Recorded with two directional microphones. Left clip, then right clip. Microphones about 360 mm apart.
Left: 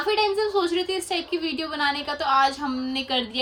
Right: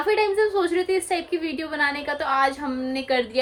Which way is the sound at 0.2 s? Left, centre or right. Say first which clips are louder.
Right 1 dB; centre.